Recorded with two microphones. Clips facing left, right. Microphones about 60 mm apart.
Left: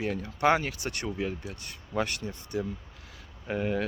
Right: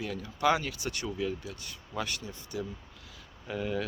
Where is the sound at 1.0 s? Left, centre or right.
Left.